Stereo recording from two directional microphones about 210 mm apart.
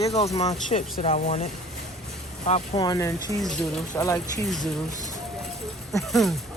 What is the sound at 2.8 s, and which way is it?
Speech, 15° left (ahead or behind).